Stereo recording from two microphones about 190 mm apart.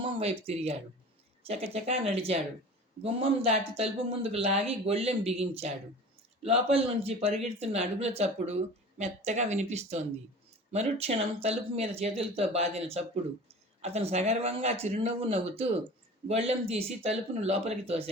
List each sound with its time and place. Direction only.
0.0 s speech: 30° right (ahead or behind)